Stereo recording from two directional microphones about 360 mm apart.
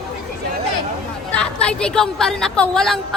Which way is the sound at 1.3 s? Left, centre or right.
Centre.